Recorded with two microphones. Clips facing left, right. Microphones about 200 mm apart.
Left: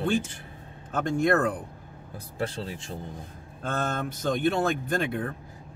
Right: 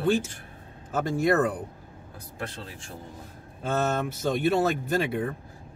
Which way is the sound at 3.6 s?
5° right (ahead or behind).